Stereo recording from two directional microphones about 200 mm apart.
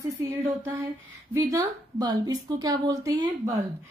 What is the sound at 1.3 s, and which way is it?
A woman's voice, 20° right (ahead or behind).